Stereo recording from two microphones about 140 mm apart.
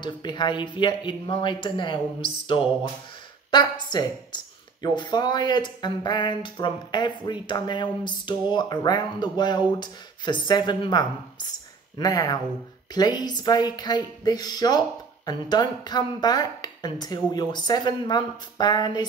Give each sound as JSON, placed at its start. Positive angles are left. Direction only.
{"t": 0.0, "sound": "a woman's voice", "side_deg": 35}